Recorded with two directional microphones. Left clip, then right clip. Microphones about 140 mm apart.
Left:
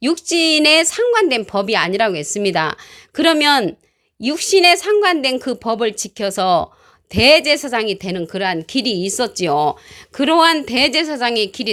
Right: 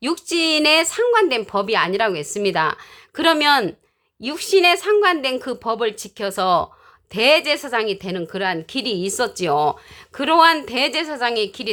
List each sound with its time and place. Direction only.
0.0 s a woman's voice: 25° left (ahead or behind)